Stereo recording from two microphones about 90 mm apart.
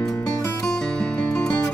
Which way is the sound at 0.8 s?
10° left (ahead or behind).